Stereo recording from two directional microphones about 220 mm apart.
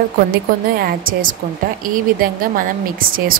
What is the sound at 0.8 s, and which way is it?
A woman's voice, 40° right (ahead or behind).